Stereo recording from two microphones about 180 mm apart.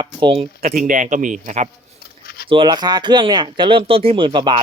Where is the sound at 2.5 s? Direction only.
25° right (ahead or behind).